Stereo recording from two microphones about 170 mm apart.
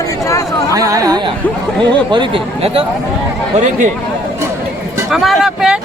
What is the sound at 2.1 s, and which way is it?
Speech, 30° right (ahead or behind).